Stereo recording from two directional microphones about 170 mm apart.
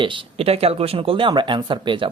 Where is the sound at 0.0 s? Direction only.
35° right (ahead or behind).